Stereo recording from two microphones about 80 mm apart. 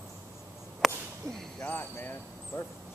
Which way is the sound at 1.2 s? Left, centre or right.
Centre.